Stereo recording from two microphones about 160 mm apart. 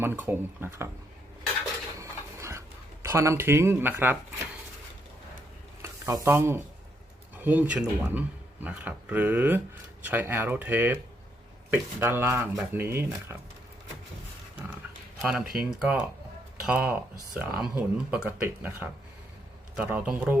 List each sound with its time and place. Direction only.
0.0 s speech: 15° right (ahead or behind)
2.0 s a sound: 20° right (ahead or behind)
5.8 s speech: 20° right (ahead or behind)
15.2 s speech: 5° right (ahead or behind)